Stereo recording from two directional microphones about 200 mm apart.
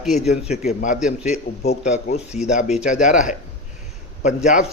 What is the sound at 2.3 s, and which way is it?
Speech, 5° right (ahead or behind).